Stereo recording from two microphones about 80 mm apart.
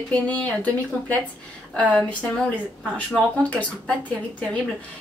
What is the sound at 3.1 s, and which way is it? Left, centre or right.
Speech, centre.